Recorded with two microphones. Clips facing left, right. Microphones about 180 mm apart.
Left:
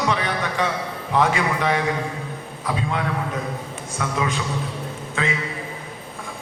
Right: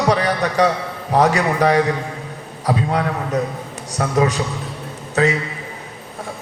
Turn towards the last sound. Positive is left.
turn(degrees=-40)  # may be behind; listen again after turning